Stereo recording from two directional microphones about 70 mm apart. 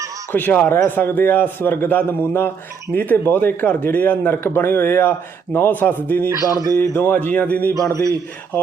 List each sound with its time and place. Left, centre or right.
0.3 s a man's voice: left
6.5 s speech: right
6.7 s a man's voice: left
7.2 s a man's voice: left
7.9 s speech: right